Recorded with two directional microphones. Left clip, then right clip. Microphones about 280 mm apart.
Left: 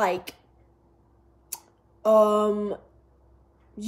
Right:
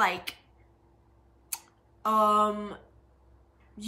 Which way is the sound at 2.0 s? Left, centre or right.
Right.